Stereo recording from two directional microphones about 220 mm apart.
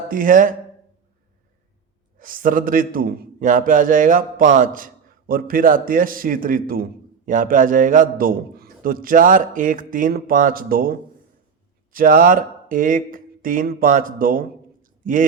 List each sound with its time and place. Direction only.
0.1 s a man's voice: 40° right (ahead or behind)
2.1 s a man's voice: 40° right (ahead or behind)